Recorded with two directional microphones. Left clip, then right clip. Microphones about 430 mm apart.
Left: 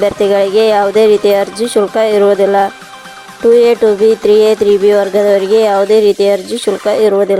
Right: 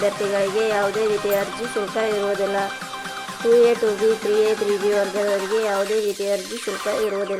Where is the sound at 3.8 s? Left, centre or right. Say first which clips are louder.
Left 11 dB; centre.